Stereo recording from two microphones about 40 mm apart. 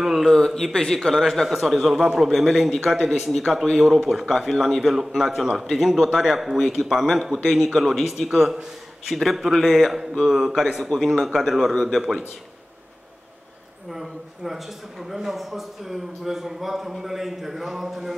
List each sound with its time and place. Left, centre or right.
0.2 s a sound: centre
0.7 s a man's voice: centre
13.8 s speech: centre